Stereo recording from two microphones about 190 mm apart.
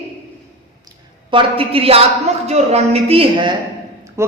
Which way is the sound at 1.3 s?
30° right (ahead or behind).